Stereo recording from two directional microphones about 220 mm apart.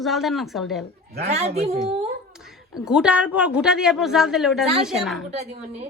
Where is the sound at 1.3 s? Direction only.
30° right (ahead or behind).